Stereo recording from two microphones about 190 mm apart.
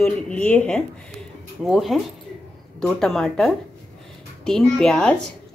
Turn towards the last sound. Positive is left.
turn(degrees=5)  # may be behind; listen again after turning